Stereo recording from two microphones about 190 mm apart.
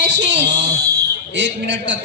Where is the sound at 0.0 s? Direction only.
70° right (ahead or behind).